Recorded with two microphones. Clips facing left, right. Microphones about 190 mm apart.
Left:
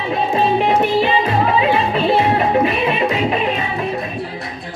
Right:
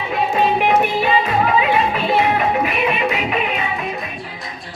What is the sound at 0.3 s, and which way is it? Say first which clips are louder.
Music: even; 30° left (ahead or behind).